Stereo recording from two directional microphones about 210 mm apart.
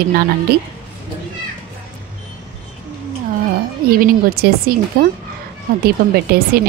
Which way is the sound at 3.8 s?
45° right (ahead or behind).